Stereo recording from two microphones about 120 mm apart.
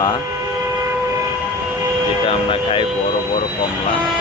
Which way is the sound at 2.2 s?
45° left (ahead or behind).